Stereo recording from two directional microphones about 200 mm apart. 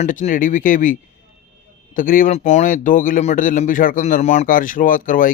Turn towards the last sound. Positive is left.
turn(degrees=45)  # may be behind; listen again after turning